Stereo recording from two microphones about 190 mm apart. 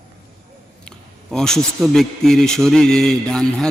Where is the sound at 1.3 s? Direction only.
5° left (ahead or behind).